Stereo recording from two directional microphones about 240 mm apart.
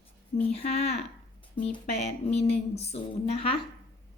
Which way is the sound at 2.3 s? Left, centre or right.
Left.